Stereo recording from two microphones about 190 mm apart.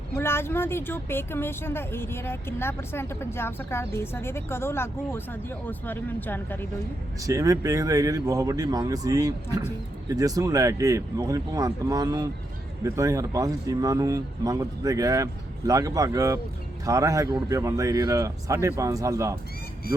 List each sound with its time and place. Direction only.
0.2 s speech: 10° left (ahead or behind)
7.2 s speech: 20° right (ahead or behind)